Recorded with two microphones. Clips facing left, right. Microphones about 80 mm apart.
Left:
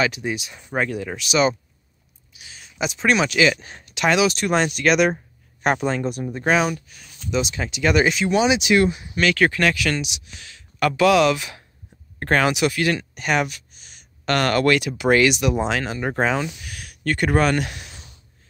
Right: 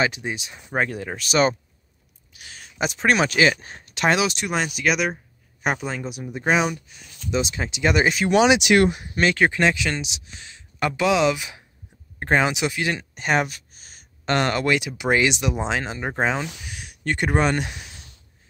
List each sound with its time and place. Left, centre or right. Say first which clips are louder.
0.0 s speech: left 1 dB; right
2.3 s speech: even; right
4.5 s speech: left 4 dB; centre
7.2 s speech: left 1 dB; right
8.3 s speech: right 2 dB; right
9.4 s speech: left 1 dB; right
14.2 s speech: left 3 dB; right